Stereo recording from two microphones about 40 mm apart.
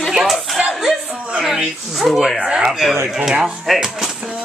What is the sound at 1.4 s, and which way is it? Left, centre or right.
Speech, centre.